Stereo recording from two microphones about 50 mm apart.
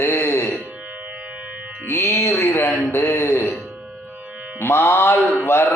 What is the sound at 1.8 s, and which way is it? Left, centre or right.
Music, left.